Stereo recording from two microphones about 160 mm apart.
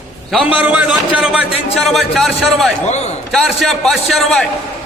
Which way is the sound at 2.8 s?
45° left (ahead or behind).